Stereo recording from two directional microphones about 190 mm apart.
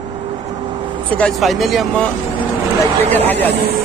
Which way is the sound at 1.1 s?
5° left (ahead or behind).